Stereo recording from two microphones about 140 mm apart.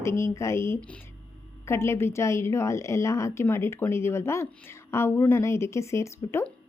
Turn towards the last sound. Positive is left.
turn(degrees=15)  # may be behind; listen again after turning